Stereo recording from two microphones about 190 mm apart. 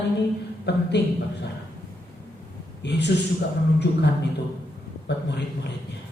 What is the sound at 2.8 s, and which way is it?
Speech, 65° left (ahead or behind).